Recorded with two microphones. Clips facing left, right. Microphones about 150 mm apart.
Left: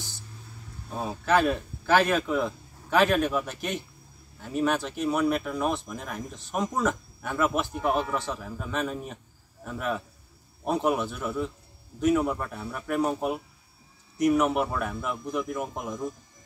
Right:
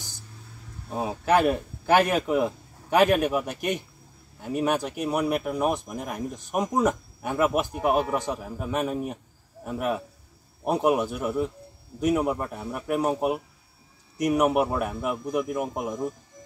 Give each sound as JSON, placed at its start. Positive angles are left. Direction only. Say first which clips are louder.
{"t": 0.8, "sound": "a man's voice", "louder": "right 3 dB", "side_deg": -15}